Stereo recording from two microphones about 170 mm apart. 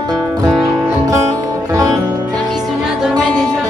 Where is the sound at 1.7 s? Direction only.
20° right (ahead or behind).